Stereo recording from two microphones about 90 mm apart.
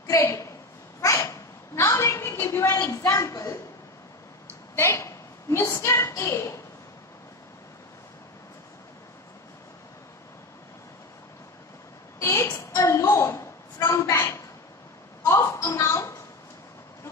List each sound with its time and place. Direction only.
0.0 s a woman's voice: 40° left (ahead or behind)
1.0 s a sound: 35° left (ahead or behind)
1.8 s a woman's voice: 35° left (ahead or behind)
4.7 s a woman's voice: 30° left (ahead or behind)
12.2 s a woman's voice: 35° left (ahead or behind)
15.2 s a sound: 35° left (ahead or behind)
15.8 s a woman's voice: 35° left (ahead or behind)